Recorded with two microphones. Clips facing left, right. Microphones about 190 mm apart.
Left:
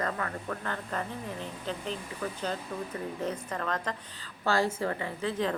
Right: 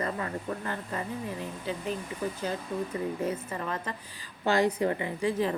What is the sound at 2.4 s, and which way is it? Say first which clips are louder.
A woman's voice: right 2 dB; 10° right (ahead or behind).